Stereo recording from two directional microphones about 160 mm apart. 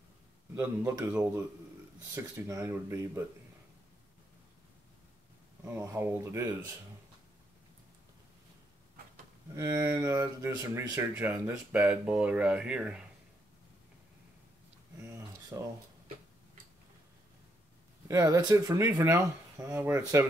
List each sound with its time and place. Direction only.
0.6 s speech: 15° right (ahead or behind)
5.7 s speech: 15° right (ahead or behind)
9.6 s speech: 20° right (ahead or behind)
15.0 s a sound: 20° right (ahead or behind)
18.0 s speech: 20° right (ahead or behind)